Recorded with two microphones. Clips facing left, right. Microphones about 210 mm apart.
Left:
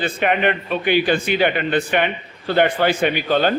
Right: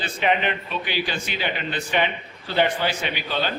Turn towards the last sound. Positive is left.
turn(degrees=50)  # may be behind; listen again after turning